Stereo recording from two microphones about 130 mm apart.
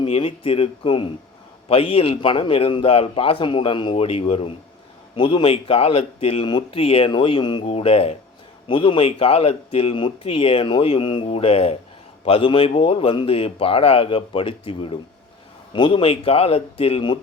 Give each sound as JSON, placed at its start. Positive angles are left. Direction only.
{"t": 0.0, "sound": "a man's voice", "side_deg": 45}